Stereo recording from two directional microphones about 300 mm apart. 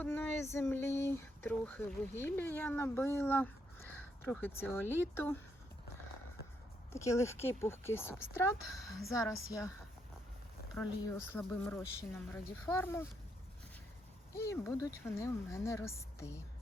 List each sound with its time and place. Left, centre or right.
0.0 s speech: centre
6.9 s speech: centre
9.1 s speech: centre
10.8 s speech: centre
14.3 s speech: centre